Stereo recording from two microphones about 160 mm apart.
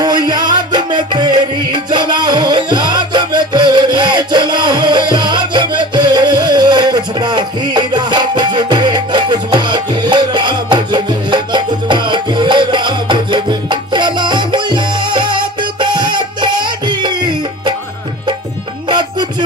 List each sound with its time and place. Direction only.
0.0 s music: 25° right (ahead or behind)
18.9 s music: 25° right (ahead or behind)